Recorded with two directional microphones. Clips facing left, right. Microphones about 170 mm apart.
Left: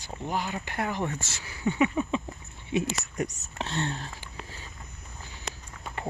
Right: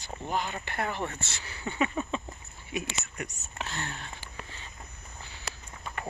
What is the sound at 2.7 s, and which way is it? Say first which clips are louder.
Speech: left 7 dB; 25° left (ahead or behind).